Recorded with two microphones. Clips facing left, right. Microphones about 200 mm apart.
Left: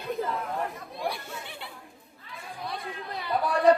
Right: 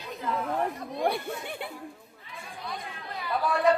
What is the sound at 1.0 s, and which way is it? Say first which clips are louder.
Chatter: right 5 dB; 55° right (ahead or behind).